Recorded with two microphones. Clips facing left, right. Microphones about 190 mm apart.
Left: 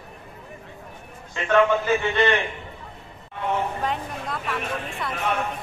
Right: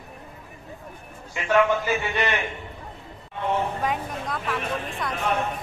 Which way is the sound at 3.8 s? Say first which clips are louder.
Right 1 dB; centre (ahead or behind).